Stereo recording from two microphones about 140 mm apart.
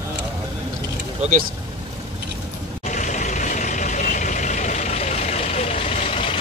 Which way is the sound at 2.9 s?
60° left (ahead or behind).